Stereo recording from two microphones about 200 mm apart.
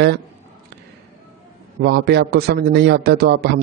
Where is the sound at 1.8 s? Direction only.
55° right (ahead or behind).